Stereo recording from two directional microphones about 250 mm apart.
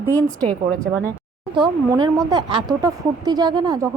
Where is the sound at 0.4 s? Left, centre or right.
Centre.